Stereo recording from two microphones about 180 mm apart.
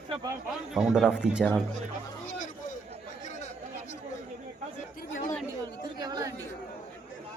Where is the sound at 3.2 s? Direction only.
40° left (ahead or behind).